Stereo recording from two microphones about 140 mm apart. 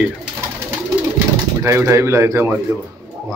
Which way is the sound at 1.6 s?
20° right (ahead or behind).